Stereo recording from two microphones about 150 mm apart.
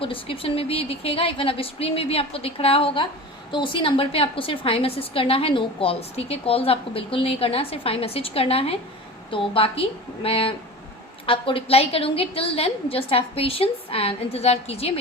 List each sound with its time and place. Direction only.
0.0 s a woman's voice: 35° left (ahead or behind)